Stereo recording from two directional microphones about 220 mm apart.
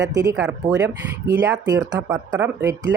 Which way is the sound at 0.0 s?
15° right (ahead or behind).